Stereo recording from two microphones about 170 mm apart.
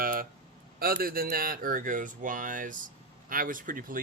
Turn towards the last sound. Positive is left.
turn(degrees=-55)  # may be behind; listen again after turning